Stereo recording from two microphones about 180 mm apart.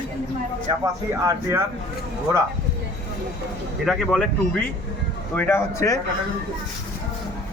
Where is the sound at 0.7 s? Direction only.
20° right (ahead or behind).